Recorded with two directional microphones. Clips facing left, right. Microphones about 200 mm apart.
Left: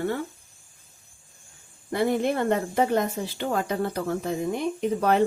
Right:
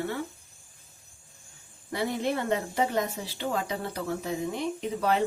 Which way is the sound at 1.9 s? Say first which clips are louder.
Left 5 dB; 55° left (ahead or behind).